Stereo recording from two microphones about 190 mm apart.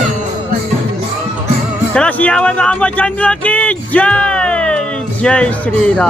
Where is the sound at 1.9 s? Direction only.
5° left (ahead or behind).